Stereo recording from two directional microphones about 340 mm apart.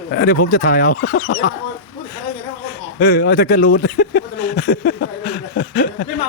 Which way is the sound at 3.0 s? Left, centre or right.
Left.